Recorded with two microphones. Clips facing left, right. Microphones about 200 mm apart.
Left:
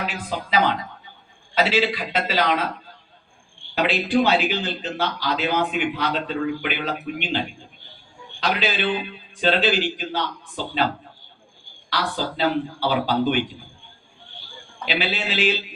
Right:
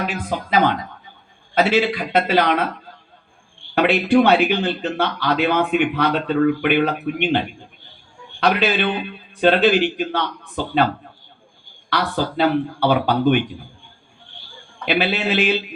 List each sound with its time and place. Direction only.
0.0 s a man's voice: 50° right (ahead or behind)
3.8 s a man's voice: 60° right (ahead or behind)
11.9 s a man's voice: 55° right (ahead or behind)
14.8 s a man's voice: 55° right (ahead or behind)